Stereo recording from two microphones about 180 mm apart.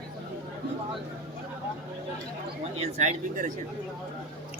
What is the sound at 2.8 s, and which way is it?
Speech, 40° right (ahead or behind).